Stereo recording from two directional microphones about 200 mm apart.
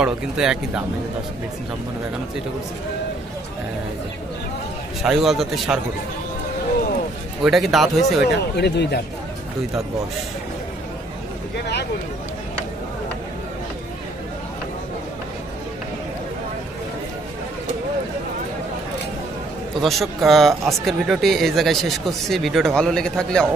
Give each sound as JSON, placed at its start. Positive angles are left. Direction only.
{"t": 0.0, "sound": "speech", "side_deg": -5}
{"t": 5.0, "sound": "speech", "side_deg": 0}
{"t": 7.4, "sound": "speech", "side_deg": 0}
{"t": 8.3, "sound": "speech", "side_deg": 55}
{"t": 19.8, "sound": "speech", "side_deg": 0}